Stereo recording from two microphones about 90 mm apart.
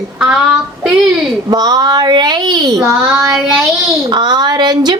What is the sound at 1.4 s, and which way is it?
Speech, 50° right (ahead or behind).